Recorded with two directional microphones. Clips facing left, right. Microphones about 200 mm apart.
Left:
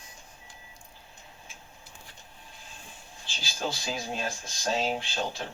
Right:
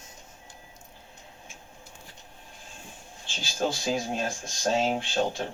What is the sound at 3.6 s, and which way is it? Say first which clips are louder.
Speech: right 6 dB; 45° right (ahead or behind).